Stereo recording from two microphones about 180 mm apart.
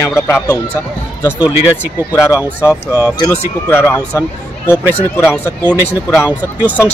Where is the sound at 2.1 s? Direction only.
15° left (ahead or behind).